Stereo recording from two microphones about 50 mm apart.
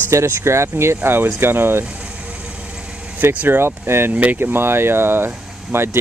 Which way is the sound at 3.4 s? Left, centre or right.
Right.